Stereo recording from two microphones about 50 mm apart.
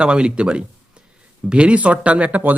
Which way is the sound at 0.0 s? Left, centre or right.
Right.